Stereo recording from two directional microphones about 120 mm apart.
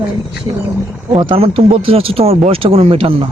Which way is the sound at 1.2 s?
45° right (ahead or behind).